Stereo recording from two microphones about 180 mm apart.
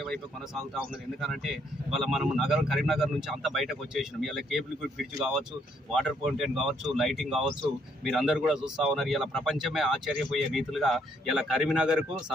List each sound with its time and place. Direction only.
0.0 s speech: centre (ahead or behind)
5.9 s speech: centre (ahead or behind)